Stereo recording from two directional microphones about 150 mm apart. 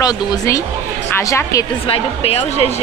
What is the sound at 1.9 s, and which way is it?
Speech, 40° left (ahead or behind).